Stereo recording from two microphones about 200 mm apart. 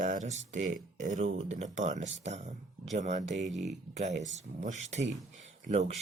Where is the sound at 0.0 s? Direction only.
40° right (ahead or behind).